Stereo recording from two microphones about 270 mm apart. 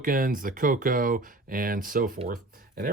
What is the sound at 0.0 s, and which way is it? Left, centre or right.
Speech, right.